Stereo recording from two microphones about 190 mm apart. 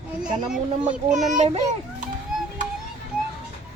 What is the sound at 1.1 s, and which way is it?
Speech, 40° right (ahead or behind).